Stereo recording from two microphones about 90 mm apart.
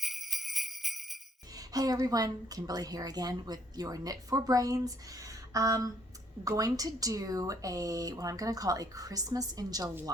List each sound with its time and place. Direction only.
0.0 s jingle bell: centre (ahead or behind)
1.5 s a woman's voice: 45° right (ahead or behind)